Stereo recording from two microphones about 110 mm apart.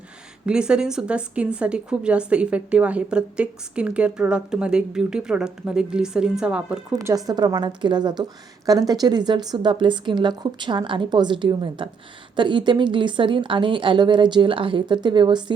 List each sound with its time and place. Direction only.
0.4 s a woman's voice: 10° right (ahead or behind)
6.9 s a woman's voice: 35° right (ahead or behind)